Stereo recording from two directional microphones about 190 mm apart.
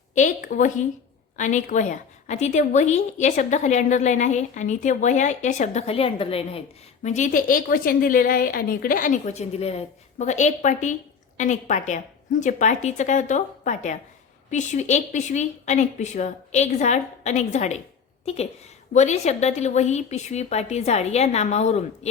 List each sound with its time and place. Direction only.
0.1 s a woman's voice: 40° left (ahead or behind)
18.9 s a woman's voice: 35° left (ahead or behind)